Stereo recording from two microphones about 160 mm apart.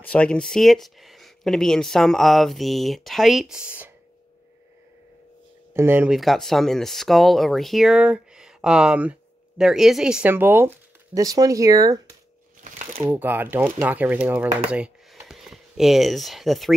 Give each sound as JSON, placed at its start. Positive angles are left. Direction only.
{"t": 0.0, "sound": "speech", "side_deg": 10}
{"t": 5.7, "sound": "speech", "side_deg": -15}
{"t": 6.1, "sound": "speech", "side_deg": 0}
{"t": 13.0, "sound": "speech", "side_deg": -10}
{"t": 14.7, "sound": "a sound", "side_deg": -5}